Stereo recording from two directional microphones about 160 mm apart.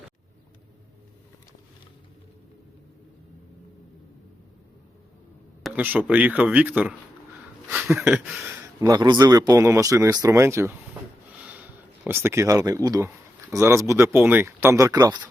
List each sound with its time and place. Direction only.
5.6 s speech: 10° right (ahead or behind)
7.7 s a sound: 5° right (ahead or behind)
8.4 s speech: 15° right (ahead or behind)
12.0 s speech: 15° right (ahead or behind)